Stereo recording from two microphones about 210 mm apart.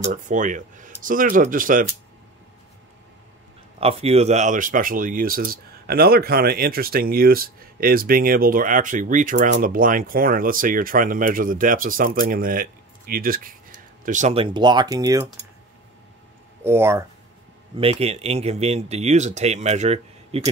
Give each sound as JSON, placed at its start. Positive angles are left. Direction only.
{"t": 0.0, "sound": "speech", "side_deg": -40}
{"t": 3.8, "sound": "speech", "side_deg": -30}
{"t": 16.6, "sound": "speech", "side_deg": -10}
{"t": 17.7, "sound": "speech", "side_deg": -30}